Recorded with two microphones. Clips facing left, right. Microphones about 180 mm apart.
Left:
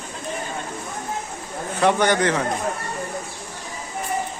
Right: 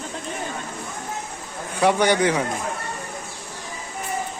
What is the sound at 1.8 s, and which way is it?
Speech, 10° right (ahead or behind).